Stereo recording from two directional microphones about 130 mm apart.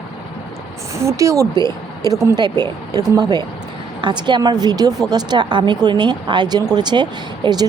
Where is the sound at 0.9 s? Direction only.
25° right (ahead or behind).